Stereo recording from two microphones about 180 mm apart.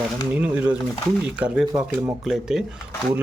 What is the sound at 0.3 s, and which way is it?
Speech, 10° right (ahead or behind).